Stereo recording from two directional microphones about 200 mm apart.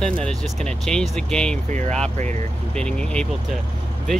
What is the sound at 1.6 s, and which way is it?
Speech, 35° right (ahead or behind).